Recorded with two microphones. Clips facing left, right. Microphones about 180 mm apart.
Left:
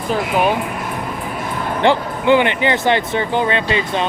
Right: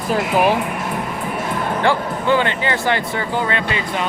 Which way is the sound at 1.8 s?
20° left (ahead or behind).